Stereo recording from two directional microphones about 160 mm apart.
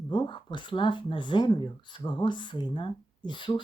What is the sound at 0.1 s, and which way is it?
Speech, 30° left (ahead or behind).